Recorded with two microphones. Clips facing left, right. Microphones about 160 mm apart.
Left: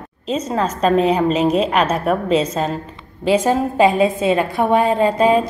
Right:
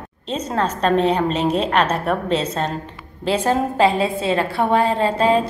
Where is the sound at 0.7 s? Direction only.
5° left (ahead or behind).